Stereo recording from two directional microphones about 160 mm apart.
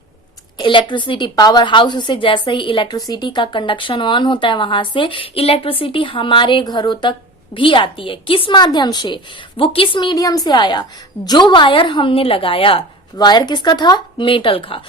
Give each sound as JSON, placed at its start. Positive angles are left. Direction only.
{"t": 0.6, "sound": "a woman's voice", "side_deg": 30}